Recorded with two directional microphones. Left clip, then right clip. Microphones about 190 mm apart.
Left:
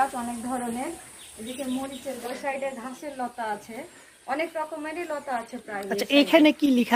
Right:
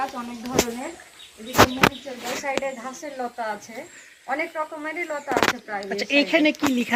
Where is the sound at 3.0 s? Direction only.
20° right (ahead or behind).